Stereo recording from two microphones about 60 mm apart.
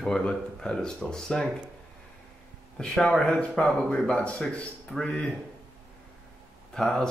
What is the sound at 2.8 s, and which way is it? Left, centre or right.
Speech, centre.